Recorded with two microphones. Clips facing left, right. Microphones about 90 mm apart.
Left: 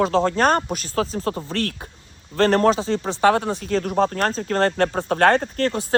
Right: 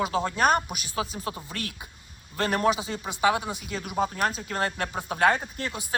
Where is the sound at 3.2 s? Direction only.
55° left (ahead or behind).